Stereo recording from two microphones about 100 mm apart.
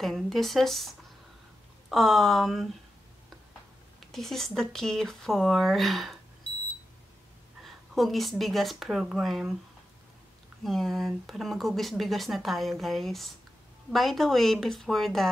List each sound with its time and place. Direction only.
0.0 s speech: centre (ahead or behind)
4.1 s speech: 5° left (ahead or behind)
6.5 s alarm clock: 20° left (ahead or behind)
7.6 s speech: centre (ahead or behind)
10.6 s speech: centre (ahead or behind)